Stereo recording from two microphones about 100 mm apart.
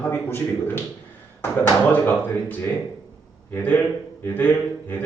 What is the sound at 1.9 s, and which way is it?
A man's voice, 15° left (ahead or behind).